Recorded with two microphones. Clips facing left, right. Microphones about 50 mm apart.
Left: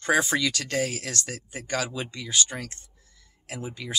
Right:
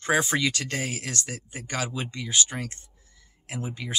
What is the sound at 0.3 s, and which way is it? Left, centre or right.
Speech, right.